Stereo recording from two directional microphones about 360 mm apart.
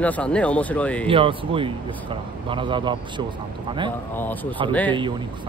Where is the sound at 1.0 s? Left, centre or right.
Centre.